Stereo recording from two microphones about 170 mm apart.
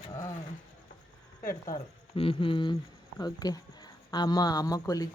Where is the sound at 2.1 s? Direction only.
30° left (ahead or behind).